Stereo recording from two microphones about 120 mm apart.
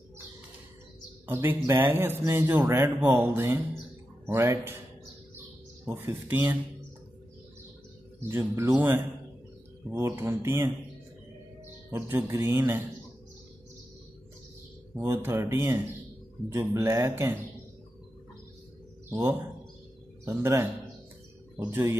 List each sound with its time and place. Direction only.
1.2 s a man's voice: 15° right (ahead or behind)
5.9 s speech: 20° right (ahead or behind)
8.2 s a man's voice: 20° right (ahead or behind)
11.9 s a man's voice: 20° right (ahead or behind)
15.0 s a man's voice: 20° right (ahead or behind)
19.0 s a man's voice: 25° right (ahead or behind)